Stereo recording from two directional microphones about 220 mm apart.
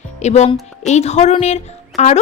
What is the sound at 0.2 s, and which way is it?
A woman's voice, 30° left (ahead or behind).